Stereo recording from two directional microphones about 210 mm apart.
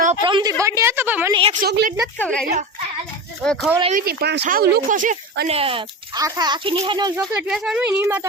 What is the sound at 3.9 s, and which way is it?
Speech, 50° right (ahead or behind).